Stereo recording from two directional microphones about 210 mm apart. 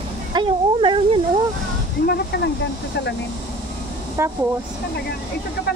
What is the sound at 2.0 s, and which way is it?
Speech, 50° left (ahead or behind).